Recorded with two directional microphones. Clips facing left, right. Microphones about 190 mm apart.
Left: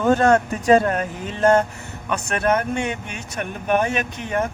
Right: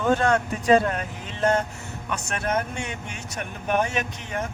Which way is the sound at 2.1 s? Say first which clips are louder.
Left 6 dB; 60° left (ahead or behind).